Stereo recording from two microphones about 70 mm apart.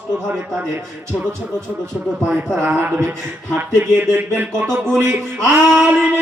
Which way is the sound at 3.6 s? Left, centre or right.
Right.